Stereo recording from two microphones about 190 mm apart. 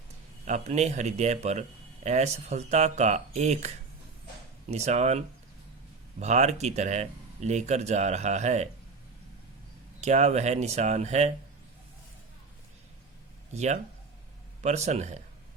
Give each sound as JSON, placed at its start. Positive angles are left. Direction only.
{"t": 0.4, "sound": "speech", "side_deg": -35}
{"t": 4.7, "sound": "speech", "side_deg": -35}
{"t": 10.0, "sound": "speech", "side_deg": -35}
{"t": 13.5, "sound": "speech", "side_deg": -35}